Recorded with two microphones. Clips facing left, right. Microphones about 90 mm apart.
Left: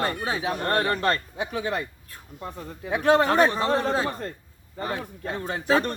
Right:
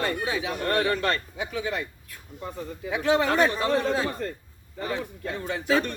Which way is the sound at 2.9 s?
45° left (ahead or behind).